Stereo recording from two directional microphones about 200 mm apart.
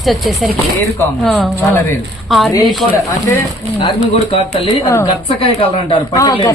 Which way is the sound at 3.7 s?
25° left (ahead or behind).